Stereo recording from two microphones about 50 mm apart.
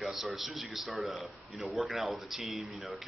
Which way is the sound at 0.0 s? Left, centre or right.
Centre.